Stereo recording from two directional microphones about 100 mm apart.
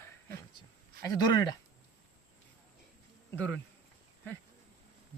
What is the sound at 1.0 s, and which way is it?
Speech, 40° left (ahead or behind).